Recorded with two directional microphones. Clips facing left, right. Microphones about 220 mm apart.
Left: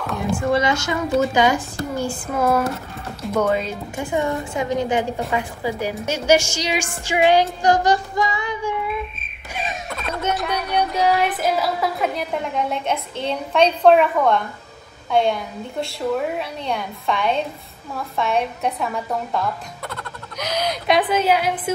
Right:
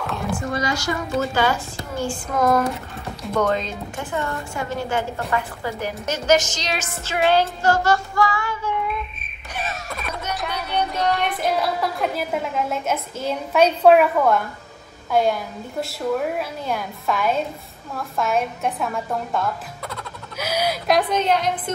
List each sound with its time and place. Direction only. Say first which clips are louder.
0.6 s a woman's voice: left 3 dB; 25° left (ahead or behind)
9.8 s a sound: left 3 dB; centre (ahead or behind)
10.3 s a woman's voice: left 1 dB; centre (ahead or behind)